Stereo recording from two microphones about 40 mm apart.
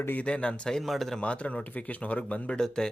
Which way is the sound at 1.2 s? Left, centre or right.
Left.